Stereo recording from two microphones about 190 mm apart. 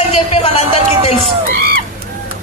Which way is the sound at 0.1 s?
30° left (ahead or behind).